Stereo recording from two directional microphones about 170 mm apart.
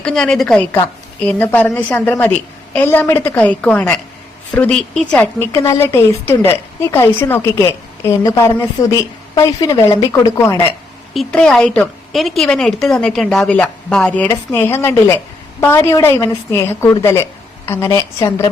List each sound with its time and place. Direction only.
0.0 s a woman's voice: 5° left (ahead or behind); by 10.6 s 20° left (ahead or behind)
11.1 s a woman's voice: centre (ahead or behind)